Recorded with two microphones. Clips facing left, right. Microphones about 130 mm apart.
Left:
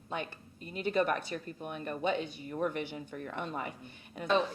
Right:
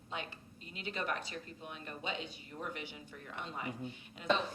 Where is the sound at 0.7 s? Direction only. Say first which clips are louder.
Left 9 dB; 50° left (ahead or behind).